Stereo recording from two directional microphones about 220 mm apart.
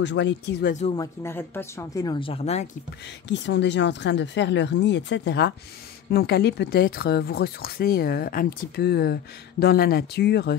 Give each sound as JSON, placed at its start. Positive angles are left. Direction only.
{"t": 0.0, "sound": "speech", "side_deg": 55}
{"t": 1.2, "sound": "speech", "side_deg": 10}
{"t": 3.3, "sound": "speech", "side_deg": 55}